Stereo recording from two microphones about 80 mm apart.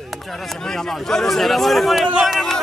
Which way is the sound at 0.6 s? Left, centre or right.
Centre.